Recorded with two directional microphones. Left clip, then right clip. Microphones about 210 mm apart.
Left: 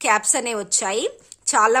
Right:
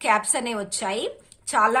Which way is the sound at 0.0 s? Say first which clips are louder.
Left 2 dB; 60° left (ahead or behind).